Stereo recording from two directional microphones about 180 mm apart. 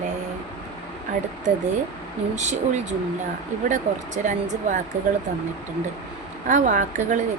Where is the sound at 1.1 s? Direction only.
45° right (ahead or behind).